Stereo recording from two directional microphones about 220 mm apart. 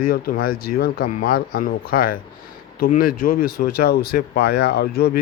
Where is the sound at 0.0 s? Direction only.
40° left (ahead or behind).